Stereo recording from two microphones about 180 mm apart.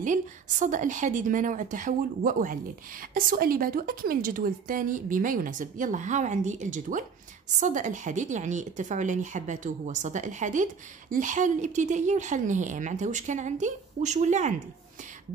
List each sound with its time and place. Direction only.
0.0 s a woman's voice: 45° right (ahead or behind)